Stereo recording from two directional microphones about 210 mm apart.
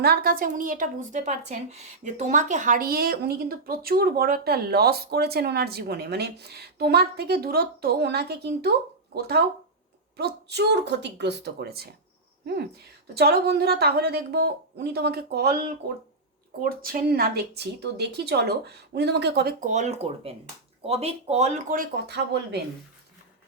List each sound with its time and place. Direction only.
0.0 s speech: 50° right (ahead or behind)
13.1 s speech: 50° right (ahead or behind)